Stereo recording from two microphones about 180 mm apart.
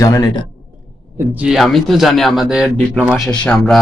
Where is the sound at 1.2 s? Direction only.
5° right (ahead or behind).